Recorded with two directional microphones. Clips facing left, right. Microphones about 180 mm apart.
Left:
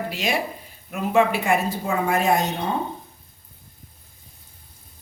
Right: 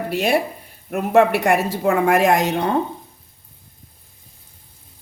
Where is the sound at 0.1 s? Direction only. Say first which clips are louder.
Right 6 dB; 60° right (ahead or behind); by 2.7 s 80° right.